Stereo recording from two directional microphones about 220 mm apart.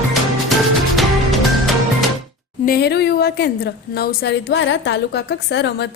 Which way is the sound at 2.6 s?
45° left (ahead or behind).